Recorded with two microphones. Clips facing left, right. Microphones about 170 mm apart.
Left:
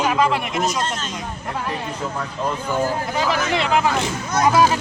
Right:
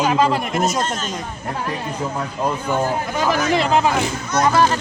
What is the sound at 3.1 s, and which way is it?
Speech, 50° right (ahead or behind).